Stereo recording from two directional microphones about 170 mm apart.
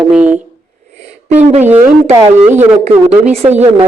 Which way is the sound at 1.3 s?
40° right (ahead or behind).